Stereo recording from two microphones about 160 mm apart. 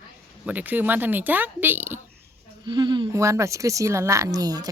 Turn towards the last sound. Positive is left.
turn(degrees=-25)  # may be behind; listen again after turning